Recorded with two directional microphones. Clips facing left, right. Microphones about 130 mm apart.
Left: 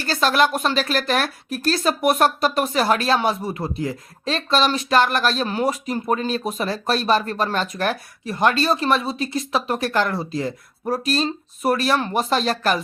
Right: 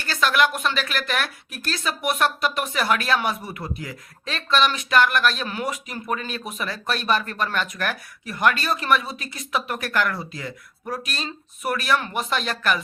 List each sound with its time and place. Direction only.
0.0 s speech: 35° left (ahead or behind)